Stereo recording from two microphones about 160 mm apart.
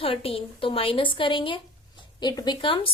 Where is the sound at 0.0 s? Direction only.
35° left (ahead or behind).